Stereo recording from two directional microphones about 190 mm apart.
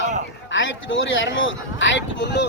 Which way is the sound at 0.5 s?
80° left.